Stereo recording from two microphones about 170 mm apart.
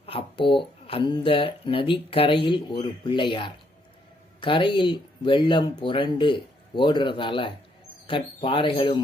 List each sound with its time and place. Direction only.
0.0 s speech: 30° left (ahead or behind)